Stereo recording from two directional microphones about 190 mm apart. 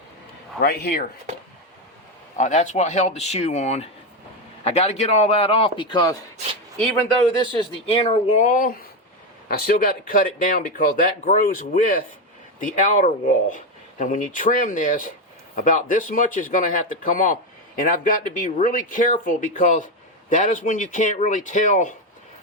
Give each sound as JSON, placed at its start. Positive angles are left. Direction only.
{"t": 0.6, "sound": "speech", "side_deg": 55}
{"t": 2.4, "sound": "speech", "side_deg": 40}
{"t": 7.6, "sound": "speech", "side_deg": 30}